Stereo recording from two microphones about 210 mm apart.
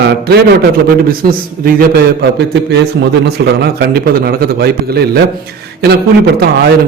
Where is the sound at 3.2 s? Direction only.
50° right (ahead or behind).